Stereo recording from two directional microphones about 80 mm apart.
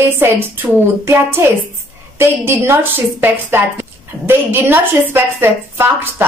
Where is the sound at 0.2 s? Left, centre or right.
Right.